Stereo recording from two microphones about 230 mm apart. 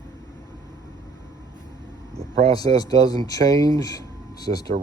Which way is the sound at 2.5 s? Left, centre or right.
Centre.